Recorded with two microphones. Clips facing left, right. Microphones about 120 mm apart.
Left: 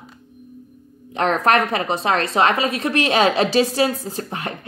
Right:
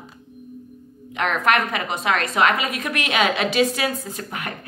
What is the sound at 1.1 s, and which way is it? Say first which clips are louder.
A woman's voice: left 3 dB; 35° left (ahead or behind).